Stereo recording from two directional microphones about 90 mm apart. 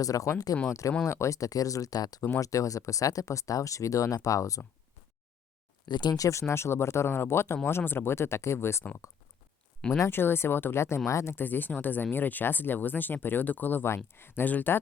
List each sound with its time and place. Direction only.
0.0 s speech: 40° left (ahead or behind)
5.9 s speech: 50° left (ahead or behind)
6.5 s speech: 30° left (ahead or behind)
10.0 s speech: 25° left (ahead or behind)